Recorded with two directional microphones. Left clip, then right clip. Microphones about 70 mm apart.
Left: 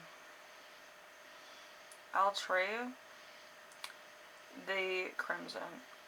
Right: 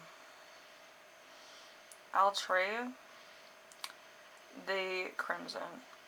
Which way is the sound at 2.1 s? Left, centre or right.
Right.